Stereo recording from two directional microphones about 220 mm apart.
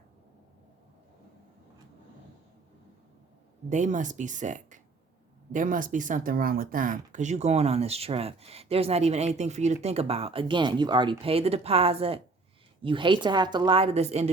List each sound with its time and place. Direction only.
3.7 s a woman's voice: 35° right (ahead or behind)